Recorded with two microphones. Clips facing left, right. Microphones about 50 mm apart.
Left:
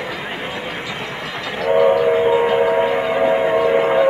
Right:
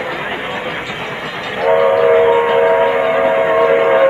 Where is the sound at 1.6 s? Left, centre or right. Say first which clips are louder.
Right 3 dB; right.